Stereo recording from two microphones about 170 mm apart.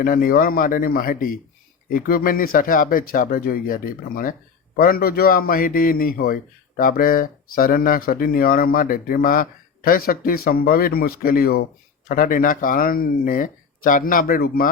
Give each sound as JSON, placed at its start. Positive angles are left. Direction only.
{"t": 0.0, "sound": "a man's voice", "side_deg": 55}